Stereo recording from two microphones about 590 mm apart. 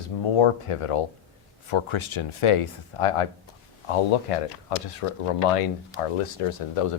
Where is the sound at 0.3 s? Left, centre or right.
Left.